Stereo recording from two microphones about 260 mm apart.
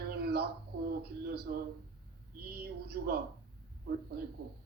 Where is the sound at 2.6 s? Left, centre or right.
Right.